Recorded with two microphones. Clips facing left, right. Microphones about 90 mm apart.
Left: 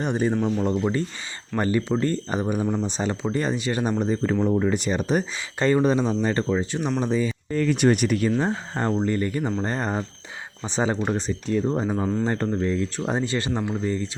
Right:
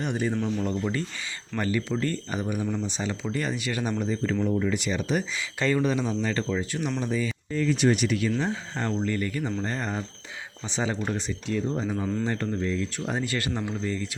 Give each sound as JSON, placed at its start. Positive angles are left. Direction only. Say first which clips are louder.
{"t": 0.0, "sound": "speech", "louder": "left 4 dB", "side_deg": 35}
{"t": 7.5, "sound": "speech", "louder": "left 3 dB", "side_deg": 55}